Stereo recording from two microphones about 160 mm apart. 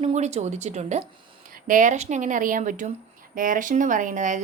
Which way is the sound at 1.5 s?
60° right (ahead or behind).